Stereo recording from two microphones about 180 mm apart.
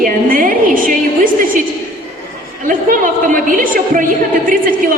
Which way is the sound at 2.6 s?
50° right (ahead or behind).